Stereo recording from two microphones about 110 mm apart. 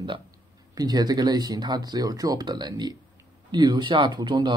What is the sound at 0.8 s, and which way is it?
A man's voice, 35° right (ahead or behind).